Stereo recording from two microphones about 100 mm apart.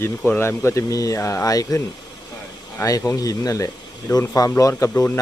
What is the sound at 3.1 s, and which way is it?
Speech, 35° left (ahead or behind).